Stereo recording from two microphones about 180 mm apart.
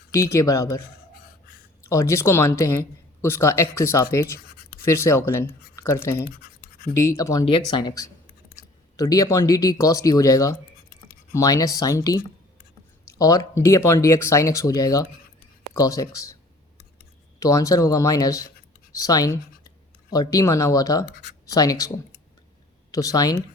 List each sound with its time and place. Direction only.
0.1 s speech: 15° left (ahead or behind)
1.9 s speech: 15° left (ahead or behind)
6.2 s a sound: 55° left (ahead or behind)
6.9 s speech: 15° left (ahead or behind)
17.4 s speech: 20° left (ahead or behind)